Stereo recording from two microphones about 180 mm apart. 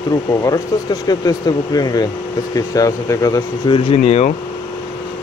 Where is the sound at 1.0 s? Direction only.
20° left (ahead or behind).